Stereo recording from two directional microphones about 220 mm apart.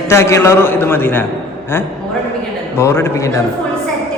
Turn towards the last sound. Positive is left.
turn(degrees=15)  # may be behind; listen again after turning